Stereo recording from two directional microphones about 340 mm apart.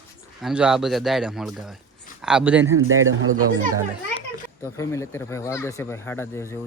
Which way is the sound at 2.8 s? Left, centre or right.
Right.